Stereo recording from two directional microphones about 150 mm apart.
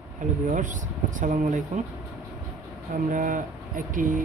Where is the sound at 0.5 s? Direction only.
55° right (ahead or behind).